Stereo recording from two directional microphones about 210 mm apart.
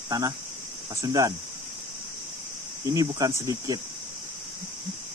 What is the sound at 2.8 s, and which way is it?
Speech, 15° right (ahead or behind).